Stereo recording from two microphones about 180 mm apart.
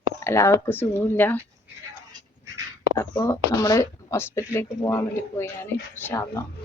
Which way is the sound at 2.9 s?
15° left (ahead or behind).